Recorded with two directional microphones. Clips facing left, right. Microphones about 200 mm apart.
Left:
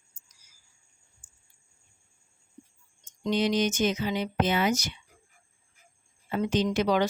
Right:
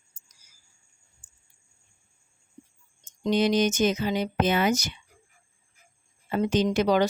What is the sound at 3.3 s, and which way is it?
Speech, 45° right (ahead or behind).